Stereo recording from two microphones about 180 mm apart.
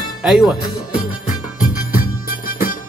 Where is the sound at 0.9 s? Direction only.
50° left (ahead or behind).